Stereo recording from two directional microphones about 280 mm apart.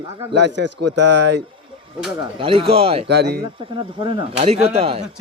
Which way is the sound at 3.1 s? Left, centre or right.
Right.